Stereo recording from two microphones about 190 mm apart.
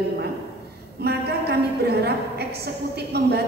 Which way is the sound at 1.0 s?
60° right (ahead or behind).